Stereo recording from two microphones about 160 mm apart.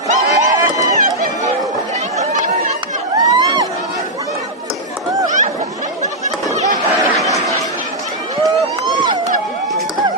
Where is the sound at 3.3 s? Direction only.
25° right (ahead or behind).